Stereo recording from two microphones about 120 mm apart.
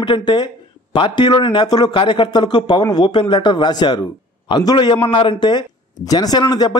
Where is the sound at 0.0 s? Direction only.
40° left (ahead or behind).